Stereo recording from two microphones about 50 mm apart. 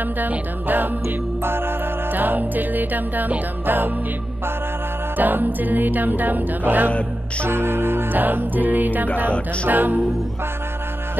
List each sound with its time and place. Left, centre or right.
0.2 s music: right
1.0 s music: right
2.1 s music: right
5.1 s music: right
7.4 s music: right